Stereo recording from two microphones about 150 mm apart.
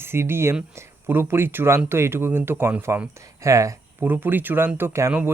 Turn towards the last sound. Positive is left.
turn(degrees=-15)  # may be behind; listen again after turning